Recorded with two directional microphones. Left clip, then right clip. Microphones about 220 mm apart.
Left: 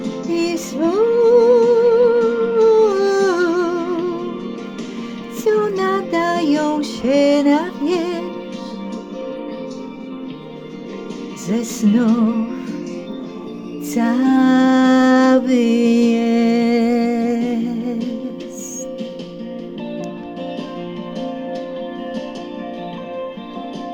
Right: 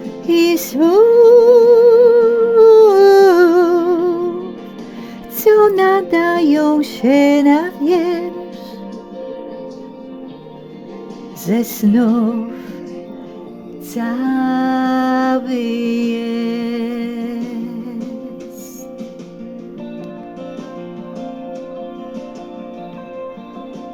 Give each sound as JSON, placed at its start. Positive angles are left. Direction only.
{"t": 0.3, "sound": "music", "side_deg": -25}
{"t": 5.4, "sound": "music", "side_deg": -25}
{"t": 11.4, "sound": "music", "side_deg": -20}
{"t": 13.9, "sound": "music", "side_deg": 5}